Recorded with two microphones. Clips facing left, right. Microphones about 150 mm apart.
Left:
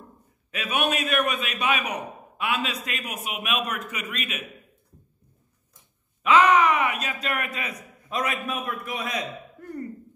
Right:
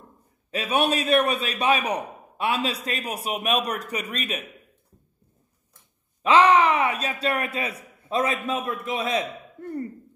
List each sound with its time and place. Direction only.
0.5 s a man's voice: 35° right (ahead or behind)
6.2 s a man's voice: 30° right (ahead or behind)